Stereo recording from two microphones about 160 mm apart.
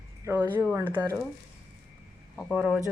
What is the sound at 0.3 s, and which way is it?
Speech, 10° right (ahead or behind).